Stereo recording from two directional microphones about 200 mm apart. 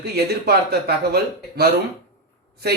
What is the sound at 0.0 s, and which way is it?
Speech, 55° right (ahead or behind).